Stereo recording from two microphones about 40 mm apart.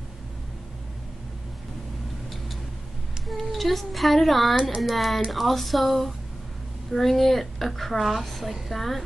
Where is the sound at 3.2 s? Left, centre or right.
Centre.